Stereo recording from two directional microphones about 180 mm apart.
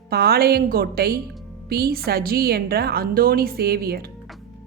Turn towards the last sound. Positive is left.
turn(degrees=-60)  # may be behind; listen again after turning